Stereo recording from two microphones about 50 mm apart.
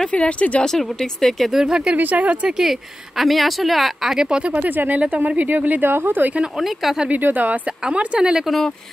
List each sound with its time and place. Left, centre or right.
0.1 s speech: left
0.7 s speech: centre
1.5 s speech: centre
2.0 s speech: right
2.5 s speech: centre
4.3 s speech: right
5.8 s speech: right
6.4 s speech: centre
7.1 s speech: right; by 8.5 s centre
8.5 s speech: centre